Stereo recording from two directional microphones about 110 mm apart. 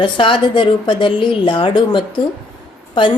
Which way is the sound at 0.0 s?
50° left (ahead or behind).